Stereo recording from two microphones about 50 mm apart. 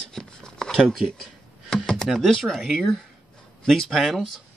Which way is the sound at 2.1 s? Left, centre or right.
Centre.